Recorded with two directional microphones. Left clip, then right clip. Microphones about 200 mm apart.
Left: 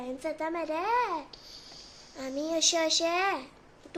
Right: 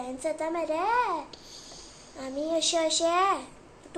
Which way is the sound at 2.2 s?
55° left (ahead or behind).